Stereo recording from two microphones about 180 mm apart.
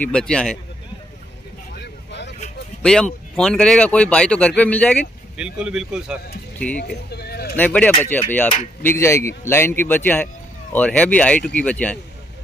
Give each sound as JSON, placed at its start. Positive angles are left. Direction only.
{"t": 0.0, "sound": "speech", "side_deg": 5}
{"t": 2.8, "sound": "speech", "side_deg": 5}
{"t": 5.4, "sound": "speech", "side_deg": -5}
{"t": 6.7, "sound": "speech", "side_deg": 65}
{"t": 7.5, "sound": "speech", "side_deg": 10}